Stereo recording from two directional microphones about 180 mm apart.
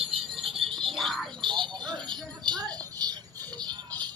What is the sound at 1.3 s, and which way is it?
Music, 25° right (ahead or behind).